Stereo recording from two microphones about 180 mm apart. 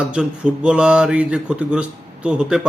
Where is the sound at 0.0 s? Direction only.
5° right (ahead or behind).